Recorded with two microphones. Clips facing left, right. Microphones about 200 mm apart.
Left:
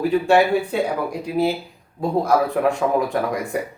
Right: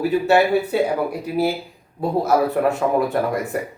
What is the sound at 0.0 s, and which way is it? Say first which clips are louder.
Speech: even; 5° right (ahead or behind).